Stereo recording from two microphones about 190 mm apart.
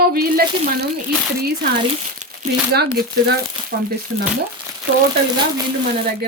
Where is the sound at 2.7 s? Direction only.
55° right (ahead or behind).